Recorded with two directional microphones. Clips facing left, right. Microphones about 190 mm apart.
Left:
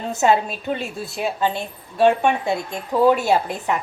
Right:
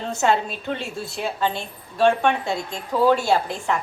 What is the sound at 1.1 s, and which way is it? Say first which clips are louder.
A woman's voice: left 3 dB; 15° left (ahead or behind).